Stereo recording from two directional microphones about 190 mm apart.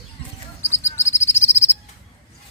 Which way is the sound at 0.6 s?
15° left (ahead or behind).